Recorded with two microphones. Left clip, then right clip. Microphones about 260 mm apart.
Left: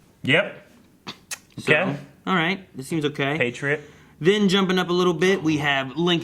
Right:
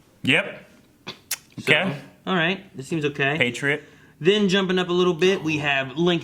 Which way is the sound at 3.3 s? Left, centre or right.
Left.